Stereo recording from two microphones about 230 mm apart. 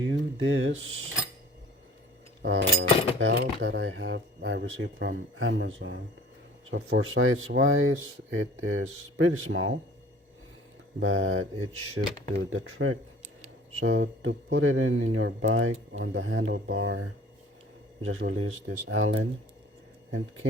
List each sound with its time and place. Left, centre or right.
0.0 s speech: right
2.4 s speech: right
11.0 s speech: right
18.3 s speech: right